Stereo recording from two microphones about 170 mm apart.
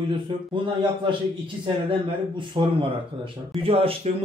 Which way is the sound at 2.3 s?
30° right (ahead or behind).